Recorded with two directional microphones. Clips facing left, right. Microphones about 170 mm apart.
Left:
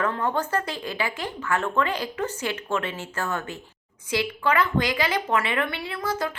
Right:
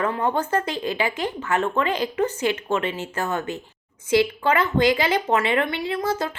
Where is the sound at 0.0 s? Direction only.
20° right (ahead or behind).